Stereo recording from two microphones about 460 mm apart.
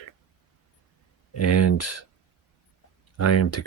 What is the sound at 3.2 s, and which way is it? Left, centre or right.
Speech, left.